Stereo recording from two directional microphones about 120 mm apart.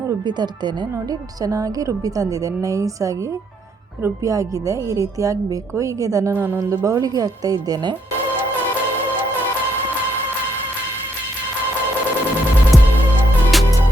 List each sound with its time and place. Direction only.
0.3 s speech: 35° right (ahead or behind)
6.3 s speech: 20° right (ahead or behind)
6.7 s speech: 30° right (ahead or behind)
13.5 s music: centre (ahead or behind)